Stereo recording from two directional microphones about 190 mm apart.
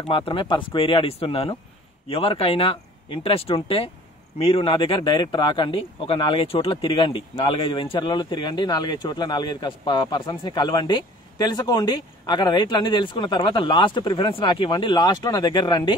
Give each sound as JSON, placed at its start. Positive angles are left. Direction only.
{"t": 0.0, "sound": "speech", "side_deg": 30}